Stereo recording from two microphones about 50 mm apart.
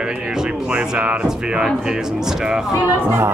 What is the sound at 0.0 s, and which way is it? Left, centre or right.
Music, centre.